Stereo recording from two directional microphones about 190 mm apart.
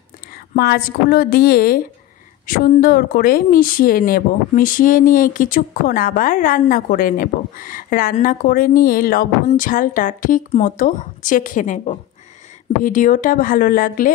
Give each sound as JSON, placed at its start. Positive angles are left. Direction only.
{"t": 0.6, "sound": "speech", "side_deg": 50}